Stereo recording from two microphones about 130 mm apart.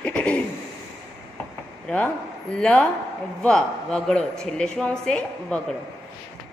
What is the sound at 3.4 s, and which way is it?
A woman's voice, 5° left (ahead or behind).